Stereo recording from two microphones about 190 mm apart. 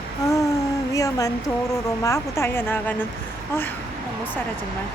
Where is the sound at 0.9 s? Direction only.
15° left (ahead or behind).